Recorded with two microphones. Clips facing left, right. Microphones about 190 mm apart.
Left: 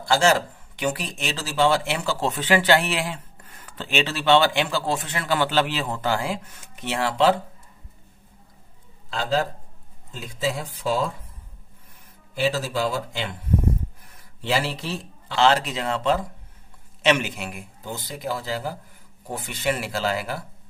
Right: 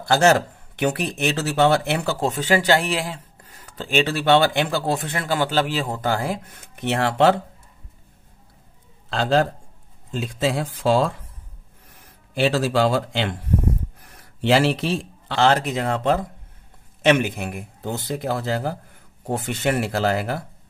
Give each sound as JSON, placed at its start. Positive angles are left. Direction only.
{"t": 0.1, "sound": "speech", "side_deg": -60}
{"t": 2.0, "sound": "speech", "side_deg": -45}
{"t": 9.1, "sound": "a man's voice", "side_deg": -70}
{"t": 10.1, "sound": "speech", "side_deg": -85}
{"t": 14.1, "sound": "speech", "side_deg": -75}
{"t": 15.3, "sound": "speech", "side_deg": -50}